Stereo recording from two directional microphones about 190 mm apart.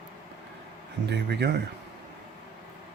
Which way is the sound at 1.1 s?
60° right (ahead or behind).